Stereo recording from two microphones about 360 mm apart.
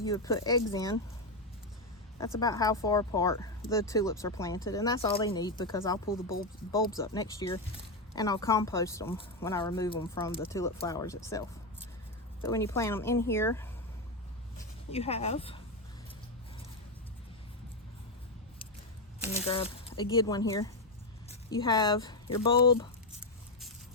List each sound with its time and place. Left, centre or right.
0.0 s speech: centre
2.1 s speech: centre
6.3 s speech: left
6.7 s speech: centre
14.8 s speech: centre
19.4 s speech: centre